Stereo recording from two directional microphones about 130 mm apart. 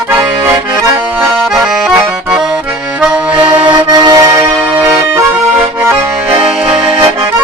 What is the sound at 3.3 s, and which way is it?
Accordion, 35° right (ahead or behind).